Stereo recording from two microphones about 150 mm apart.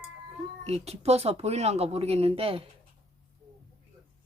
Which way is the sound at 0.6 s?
45° right (ahead or behind).